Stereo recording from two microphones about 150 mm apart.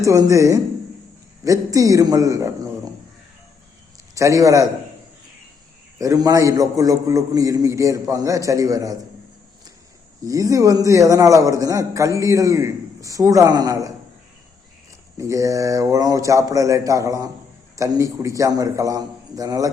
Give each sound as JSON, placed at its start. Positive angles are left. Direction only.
{"t": 0.0, "sound": "a man's voice", "side_deg": -20}
{"t": 4.1, "sound": "a man's voice", "side_deg": -20}
{"t": 6.0, "sound": "a man's voice", "side_deg": -20}
{"t": 10.2, "sound": "a man's voice", "side_deg": -20}
{"t": 15.2, "sound": "a man's voice", "side_deg": -20}